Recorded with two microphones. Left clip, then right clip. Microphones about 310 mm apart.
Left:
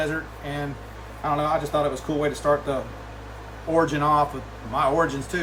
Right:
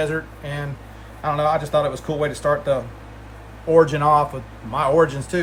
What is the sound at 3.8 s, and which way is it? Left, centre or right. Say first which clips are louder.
Speech: right 5 dB; right.